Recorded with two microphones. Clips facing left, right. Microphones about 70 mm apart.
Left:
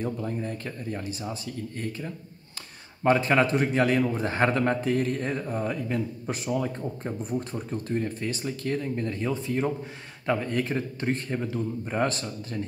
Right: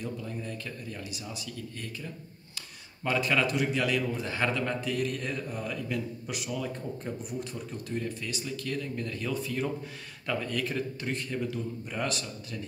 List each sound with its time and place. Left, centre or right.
0.0 s a man's voice: left